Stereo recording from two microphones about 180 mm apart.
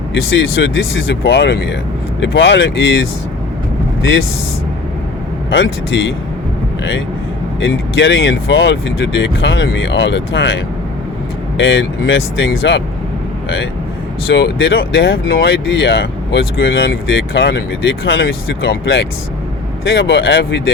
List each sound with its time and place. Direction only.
0.3 s speech: 90° left
5.5 s speech: 90° left
7.6 s speech: 90° left
14.3 s speech: 90° left
15.3 s speech: 75° left (ahead or behind); by 20.7 s 90° left